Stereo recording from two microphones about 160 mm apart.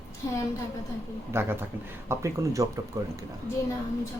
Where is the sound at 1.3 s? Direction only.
15° right (ahead or behind).